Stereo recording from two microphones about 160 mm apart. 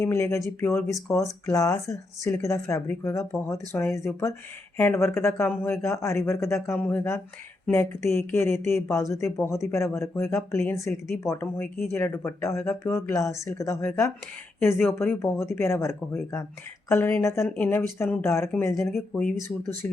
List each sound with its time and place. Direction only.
0.0 s speech: 20° left (ahead or behind)